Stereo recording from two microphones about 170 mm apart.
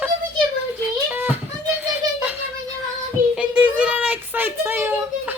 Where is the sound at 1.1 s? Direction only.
10° right (ahead or behind).